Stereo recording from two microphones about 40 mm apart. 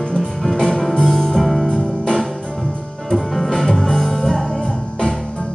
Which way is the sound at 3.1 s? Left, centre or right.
Centre.